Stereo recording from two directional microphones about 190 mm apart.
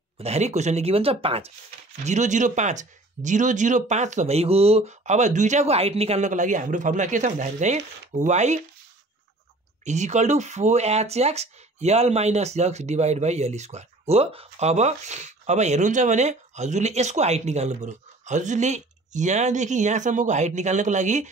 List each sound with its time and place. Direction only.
0.2 s speech: 35° right (ahead or behind)
9.8 s speech: 40° right (ahead or behind)